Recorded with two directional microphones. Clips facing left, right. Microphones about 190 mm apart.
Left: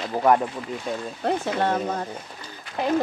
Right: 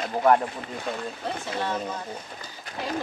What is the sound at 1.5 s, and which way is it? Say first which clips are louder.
Speech: left 5 dB; 50° left (ahead or behind).